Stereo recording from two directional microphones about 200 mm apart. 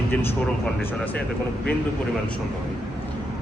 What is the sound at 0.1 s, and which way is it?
A man's voice, 10° left (ahead or behind).